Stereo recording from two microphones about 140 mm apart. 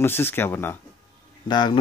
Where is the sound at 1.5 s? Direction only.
35° left (ahead or behind).